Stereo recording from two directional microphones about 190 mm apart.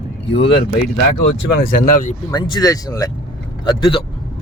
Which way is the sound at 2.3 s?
20° left (ahead or behind).